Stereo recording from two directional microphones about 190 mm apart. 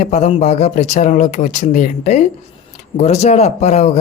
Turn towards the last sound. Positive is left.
turn(degrees=35)  # may be behind; listen again after turning